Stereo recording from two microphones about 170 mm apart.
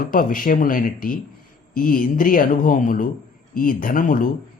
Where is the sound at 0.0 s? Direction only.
55° left (ahead or behind).